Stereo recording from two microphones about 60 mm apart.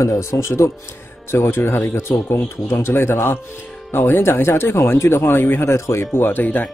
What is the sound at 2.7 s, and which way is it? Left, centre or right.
Speech, left.